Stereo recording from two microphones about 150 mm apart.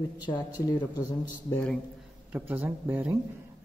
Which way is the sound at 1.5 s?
10° left (ahead or behind).